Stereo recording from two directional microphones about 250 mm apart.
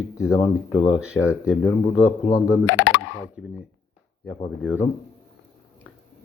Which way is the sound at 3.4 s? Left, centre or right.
Centre.